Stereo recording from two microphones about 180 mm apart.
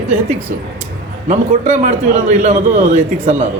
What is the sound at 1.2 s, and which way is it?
A man's voice, 40° right (ahead or behind).